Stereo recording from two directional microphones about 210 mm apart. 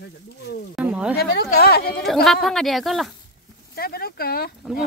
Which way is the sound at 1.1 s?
45° left (ahead or behind).